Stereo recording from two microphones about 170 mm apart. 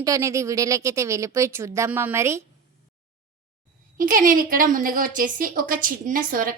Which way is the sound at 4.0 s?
55° right (ahead or behind).